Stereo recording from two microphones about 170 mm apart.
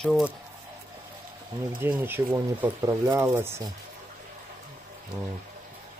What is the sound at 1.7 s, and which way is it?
Speech, 10° right (ahead or behind).